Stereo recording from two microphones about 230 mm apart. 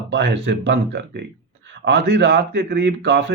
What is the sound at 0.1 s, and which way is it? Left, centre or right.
Speech, right.